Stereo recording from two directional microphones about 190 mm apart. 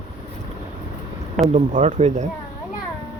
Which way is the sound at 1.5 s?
40° right (ahead or behind).